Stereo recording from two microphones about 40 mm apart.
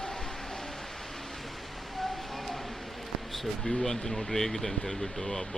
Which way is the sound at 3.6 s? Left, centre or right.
Left.